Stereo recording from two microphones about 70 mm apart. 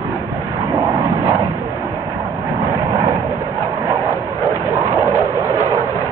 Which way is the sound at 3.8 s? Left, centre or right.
Right.